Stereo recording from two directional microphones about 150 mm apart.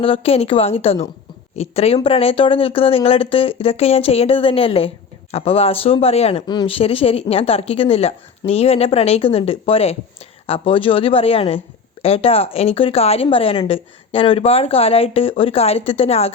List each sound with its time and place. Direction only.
0.0 s speech: 40° left (ahead or behind)